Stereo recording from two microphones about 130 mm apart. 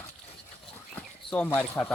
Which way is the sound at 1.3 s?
10° left (ahead or behind).